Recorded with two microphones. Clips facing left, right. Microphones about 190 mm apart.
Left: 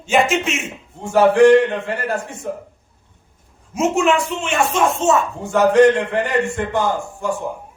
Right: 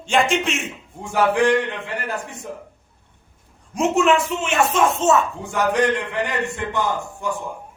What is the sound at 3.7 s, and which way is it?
Speech, centre (ahead or behind).